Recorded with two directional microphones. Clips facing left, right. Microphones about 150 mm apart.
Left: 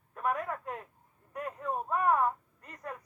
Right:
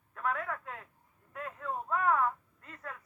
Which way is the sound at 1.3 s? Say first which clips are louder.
Left 3 dB; 15° left (ahead or behind).